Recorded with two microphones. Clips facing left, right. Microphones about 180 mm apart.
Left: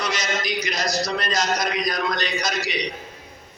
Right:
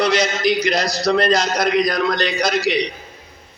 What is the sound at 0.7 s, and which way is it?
Speech, 30° right (ahead or behind).